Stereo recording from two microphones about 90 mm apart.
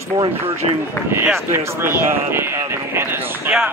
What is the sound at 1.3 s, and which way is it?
Speech, 30° right (ahead or behind).